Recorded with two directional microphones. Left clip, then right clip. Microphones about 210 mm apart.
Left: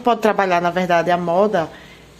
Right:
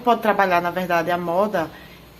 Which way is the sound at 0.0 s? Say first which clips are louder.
Left 1 dB; 35° left (ahead or behind).